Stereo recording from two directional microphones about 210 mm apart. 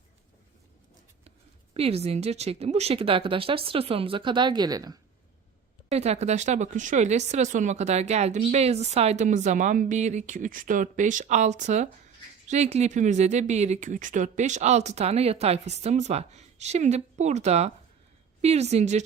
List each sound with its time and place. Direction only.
1.7 s speech: 30° right (ahead or behind)
5.9 s speech: 30° right (ahead or behind)